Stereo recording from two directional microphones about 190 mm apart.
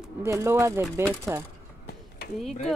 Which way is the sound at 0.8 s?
Centre (ahead or behind).